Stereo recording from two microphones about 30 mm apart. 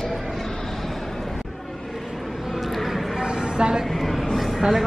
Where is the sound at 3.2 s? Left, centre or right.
Right.